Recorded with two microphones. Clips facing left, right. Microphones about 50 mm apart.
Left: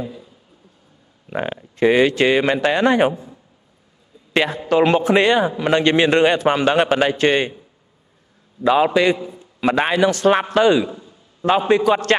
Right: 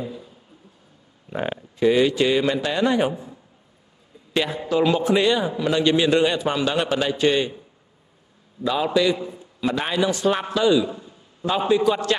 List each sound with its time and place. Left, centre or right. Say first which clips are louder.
1.3 s a man's voice: left 2 dB; left
4.3 s a man's voice: left 5 dB; left
8.6 s a man's voice: left 5 dB; left
10.9 s a sound: even; centre
11.4 s a man's voice: left 4 dB; left